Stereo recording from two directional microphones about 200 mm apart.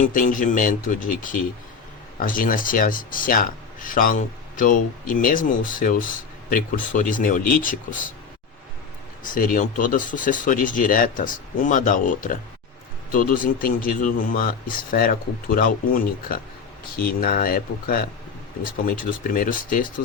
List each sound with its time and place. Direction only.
0.0 s a man's voice: 40° left (ahead or behind)
9.2 s a man's voice: 45° left (ahead or behind)